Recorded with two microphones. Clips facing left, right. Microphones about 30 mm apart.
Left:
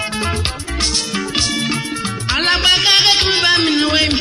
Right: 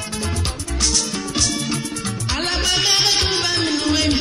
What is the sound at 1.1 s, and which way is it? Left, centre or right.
Music, left.